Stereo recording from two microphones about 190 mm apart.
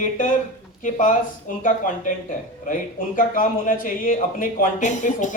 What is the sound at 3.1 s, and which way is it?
A man's voice, 45° left (ahead or behind).